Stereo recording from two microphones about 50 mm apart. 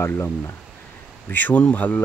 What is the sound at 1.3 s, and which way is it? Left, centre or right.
Speech, left.